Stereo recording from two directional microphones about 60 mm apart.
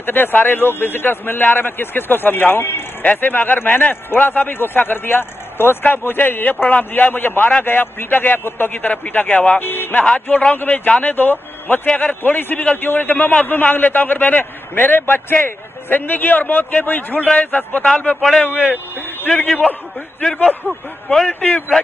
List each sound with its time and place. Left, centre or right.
0.0 s a man's voice: left
8.9 s speech: left
9.6 s a man's voice: left
12.2 s a man's voice: left
17.8 s speech: centre
21.3 s speech: centre